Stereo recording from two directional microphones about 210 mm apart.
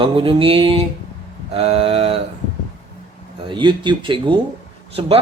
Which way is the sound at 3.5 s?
20° right (ahead or behind).